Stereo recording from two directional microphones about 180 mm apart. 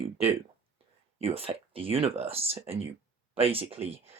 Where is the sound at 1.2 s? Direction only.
35° right (ahead or behind).